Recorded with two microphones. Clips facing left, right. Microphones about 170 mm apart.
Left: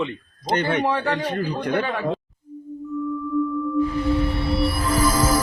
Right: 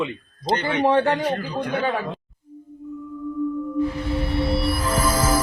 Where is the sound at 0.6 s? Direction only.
50° left (ahead or behind).